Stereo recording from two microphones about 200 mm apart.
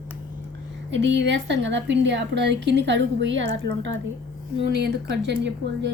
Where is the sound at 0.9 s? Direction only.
65° right (ahead or behind).